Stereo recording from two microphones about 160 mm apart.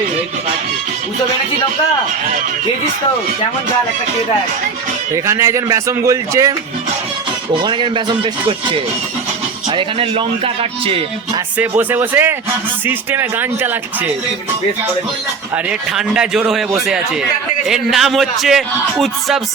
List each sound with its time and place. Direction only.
5.1 s speech: 20° right (ahead or behind)
7.5 s speech: 30° right (ahead or behind)
11.5 s speech: 10° right (ahead or behind)
15.5 s speech: 5° right (ahead or behind)